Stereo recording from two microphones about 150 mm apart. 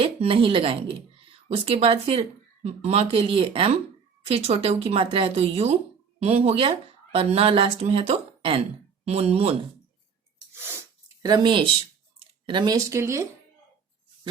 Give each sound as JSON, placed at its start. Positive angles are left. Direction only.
{"t": 0.0, "sound": "speech", "side_deg": -40}
{"t": 10.5, "sound": "sneeze", "side_deg": -15}
{"t": 11.2, "sound": "speech", "side_deg": -25}